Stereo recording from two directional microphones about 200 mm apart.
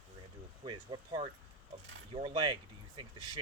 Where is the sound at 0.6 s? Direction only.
20° right (ahead or behind).